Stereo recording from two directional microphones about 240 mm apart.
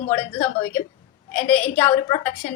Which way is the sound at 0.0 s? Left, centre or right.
Left.